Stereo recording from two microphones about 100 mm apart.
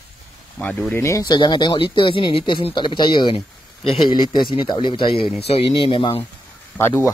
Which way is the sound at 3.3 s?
70° left (ahead or behind).